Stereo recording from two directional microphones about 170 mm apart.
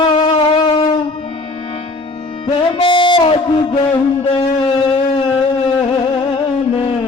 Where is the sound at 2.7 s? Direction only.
30° left (ahead or behind).